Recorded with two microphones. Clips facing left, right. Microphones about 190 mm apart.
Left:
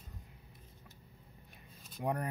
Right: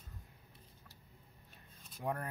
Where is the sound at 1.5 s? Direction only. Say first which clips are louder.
Left 4 dB; 15° left (ahead or behind).